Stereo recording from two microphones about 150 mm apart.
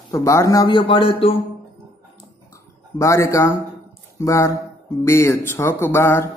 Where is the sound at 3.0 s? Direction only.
20° left (ahead or behind).